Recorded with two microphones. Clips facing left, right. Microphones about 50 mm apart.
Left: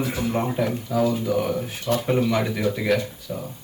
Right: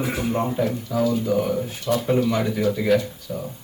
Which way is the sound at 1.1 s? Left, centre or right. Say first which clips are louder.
Right 1 dB; left.